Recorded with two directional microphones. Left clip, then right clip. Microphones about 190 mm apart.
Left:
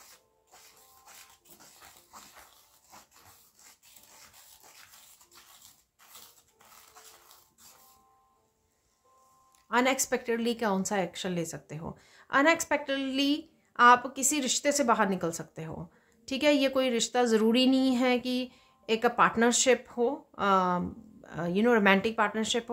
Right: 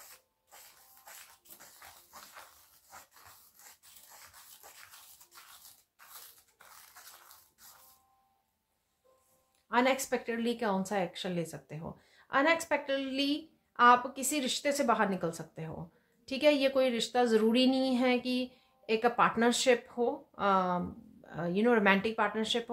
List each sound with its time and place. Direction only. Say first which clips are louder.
9.7 s speech: left 2 dB; 30° left (ahead or behind)